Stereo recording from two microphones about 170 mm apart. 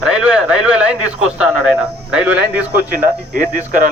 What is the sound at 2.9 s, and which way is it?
Speech, 55° right (ahead or behind).